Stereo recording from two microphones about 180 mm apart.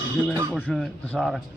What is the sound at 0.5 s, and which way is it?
Speech, 5° left (ahead or behind).